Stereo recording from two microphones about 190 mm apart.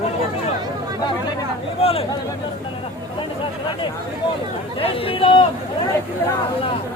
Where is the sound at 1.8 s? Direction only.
30° left (ahead or behind).